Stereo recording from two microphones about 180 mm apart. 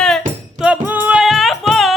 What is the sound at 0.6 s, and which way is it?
Music, 10° right (ahead or behind).